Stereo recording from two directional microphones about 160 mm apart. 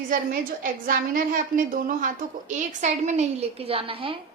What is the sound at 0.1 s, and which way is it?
A woman's voice, 60° right (ahead or behind).